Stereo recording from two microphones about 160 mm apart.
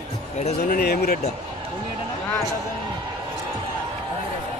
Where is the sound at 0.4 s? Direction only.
45° left (ahead or behind).